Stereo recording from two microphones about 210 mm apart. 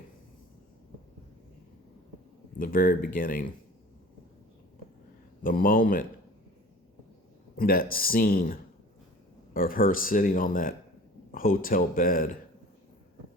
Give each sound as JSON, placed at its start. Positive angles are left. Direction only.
{"t": 2.6, "sound": "a man's voice", "side_deg": 40}
{"t": 5.4, "sound": "speech", "side_deg": 40}
{"t": 7.5, "sound": "a man's voice", "side_deg": 45}